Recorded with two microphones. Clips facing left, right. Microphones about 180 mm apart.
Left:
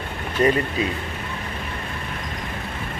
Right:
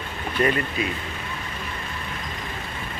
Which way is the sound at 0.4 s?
30° left (ahead or behind).